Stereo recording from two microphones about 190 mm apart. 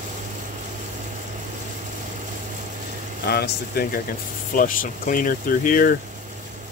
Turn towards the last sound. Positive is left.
turn(degrees=50)  # may be behind; listen again after turning